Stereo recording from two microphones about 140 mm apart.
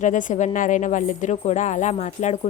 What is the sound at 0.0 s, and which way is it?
A woman's voice, 65° left (ahead or behind).